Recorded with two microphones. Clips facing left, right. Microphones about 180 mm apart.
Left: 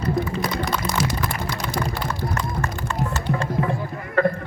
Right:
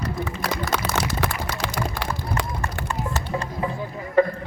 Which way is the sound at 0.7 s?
75° right (ahead or behind).